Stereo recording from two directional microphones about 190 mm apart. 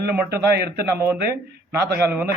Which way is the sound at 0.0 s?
55° right (ahead or behind).